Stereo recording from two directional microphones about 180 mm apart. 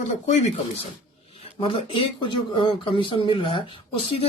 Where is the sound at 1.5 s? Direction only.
30° left (ahead or behind).